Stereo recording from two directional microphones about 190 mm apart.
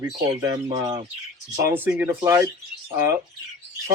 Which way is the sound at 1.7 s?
10° right (ahead or behind).